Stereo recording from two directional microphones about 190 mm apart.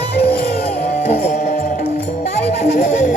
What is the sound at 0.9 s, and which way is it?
Music, 40° left (ahead or behind).